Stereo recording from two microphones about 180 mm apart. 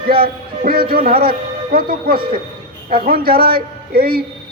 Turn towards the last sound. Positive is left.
turn(degrees=-55)  # may be behind; listen again after turning